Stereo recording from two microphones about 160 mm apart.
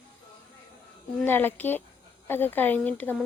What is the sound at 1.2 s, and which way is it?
A woman's voice, 10° left (ahead or behind).